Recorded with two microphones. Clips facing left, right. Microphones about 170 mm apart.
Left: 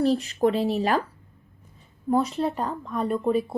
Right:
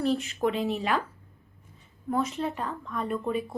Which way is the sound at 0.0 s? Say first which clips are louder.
Left 5 dB; 35° left (ahead or behind).